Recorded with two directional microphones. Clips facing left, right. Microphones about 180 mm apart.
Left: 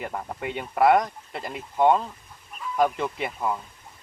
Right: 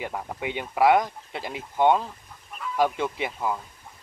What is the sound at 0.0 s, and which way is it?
Speech, centre (ahead or behind).